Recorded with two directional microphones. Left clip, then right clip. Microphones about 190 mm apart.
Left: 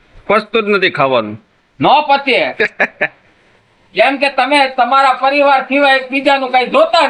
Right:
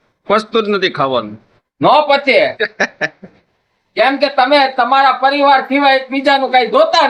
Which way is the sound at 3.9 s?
20° right (ahead or behind).